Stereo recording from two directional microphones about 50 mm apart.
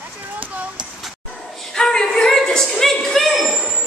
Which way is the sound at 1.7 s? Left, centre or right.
Centre.